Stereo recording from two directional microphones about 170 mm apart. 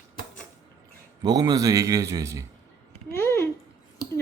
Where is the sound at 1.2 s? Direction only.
25° right (ahead or behind).